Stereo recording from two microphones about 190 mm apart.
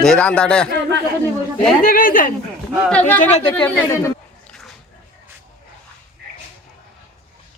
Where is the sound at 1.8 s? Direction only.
45° left (ahead or behind).